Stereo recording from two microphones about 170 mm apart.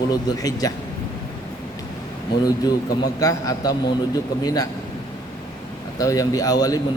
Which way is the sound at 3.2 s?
20° left (ahead or behind).